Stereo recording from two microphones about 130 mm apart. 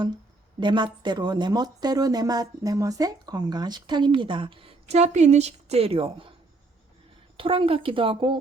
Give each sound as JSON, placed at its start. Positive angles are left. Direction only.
{"t": 0.6, "sound": "speech", "side_deg": -35}
{"t": 7.3, "sound": "speech", "side_deg": -45}